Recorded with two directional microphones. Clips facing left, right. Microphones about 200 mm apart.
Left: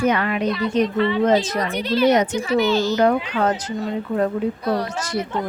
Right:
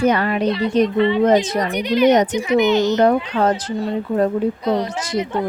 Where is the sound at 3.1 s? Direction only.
35° right (ahead or behind).